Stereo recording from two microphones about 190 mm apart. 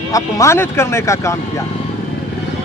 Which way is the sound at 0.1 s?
15° left (ahead or behind).